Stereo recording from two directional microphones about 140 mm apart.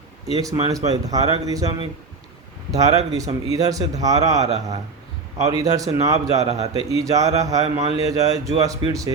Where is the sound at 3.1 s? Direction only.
25° right (ahead or behind).